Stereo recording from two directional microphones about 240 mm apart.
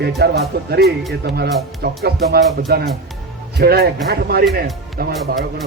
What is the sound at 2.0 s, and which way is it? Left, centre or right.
Music, right.